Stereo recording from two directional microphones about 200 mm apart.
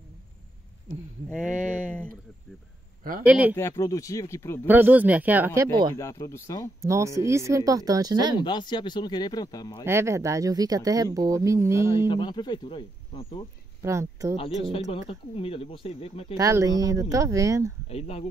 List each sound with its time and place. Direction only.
1.3 s speech: 5° right (ahead or behind)
3.3 s speech: 5° right (ahead or behind)
3.5 s speech: 15° left (ahead or behind)
4.6 s speech: 10° right (ahead or behind)
5.7 s speech: 25° right (ahead or behind)
5.9 s speech: 15° left (ahead or behind)
6.8 s speech: 15° right (ahead or behind)
8.4 s speech: 20° left (ahead or behind)
9.8 s speech: 15° right (ahead or behind)
12.1 s speech: 20° left (ahead or behind)
13.8 s speech: 15° right (ahead or behind)
14.6 s speech: 25° left (ahead or behind)
16.3 s speech: 15° right (ahead or behind)
17.8 s speech: 30° left (ahead or behind)